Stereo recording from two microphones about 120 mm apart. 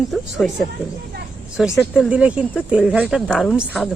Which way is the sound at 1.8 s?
5° right (ahead or behind).